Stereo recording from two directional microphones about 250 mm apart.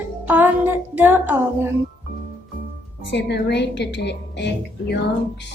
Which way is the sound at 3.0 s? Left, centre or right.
Left.